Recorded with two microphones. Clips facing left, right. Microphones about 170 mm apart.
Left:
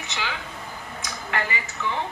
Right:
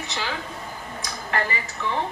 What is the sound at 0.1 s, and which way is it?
A woman's voice, 40° right (ahead or behind).